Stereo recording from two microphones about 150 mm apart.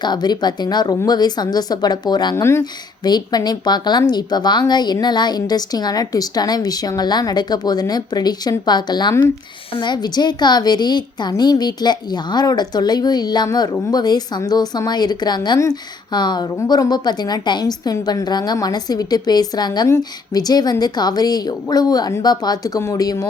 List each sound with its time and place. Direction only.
0.0 s a woman's voice: 30° left (ahead or behind)
2.3 s a woman's voice: 20° left (ahead or behind)